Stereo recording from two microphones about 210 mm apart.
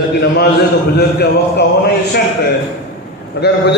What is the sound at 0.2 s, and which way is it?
A man's voice, 50° left (ahead or behind).